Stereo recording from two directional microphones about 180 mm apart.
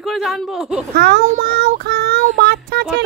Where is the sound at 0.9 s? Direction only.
65° right (ahead or behind).